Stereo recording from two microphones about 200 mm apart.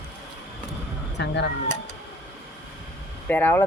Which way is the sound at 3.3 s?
10° left (ahead or behind).